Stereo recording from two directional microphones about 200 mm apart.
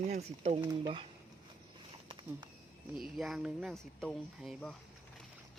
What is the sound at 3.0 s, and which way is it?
Speech, centre (ahead or behind).